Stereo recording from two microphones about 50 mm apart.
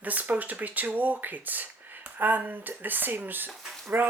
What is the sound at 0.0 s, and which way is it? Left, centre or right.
Speech, right.